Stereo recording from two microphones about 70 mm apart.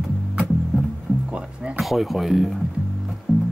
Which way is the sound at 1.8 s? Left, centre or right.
Centre.